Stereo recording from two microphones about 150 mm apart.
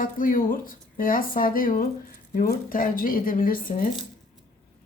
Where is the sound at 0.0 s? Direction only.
70° left (ahead or behind).